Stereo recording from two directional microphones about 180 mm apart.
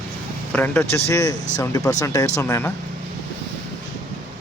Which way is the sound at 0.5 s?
10° left (ahead or behind).